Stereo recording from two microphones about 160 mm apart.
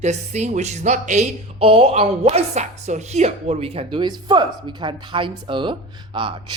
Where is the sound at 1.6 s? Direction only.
35° right (ahead or behind).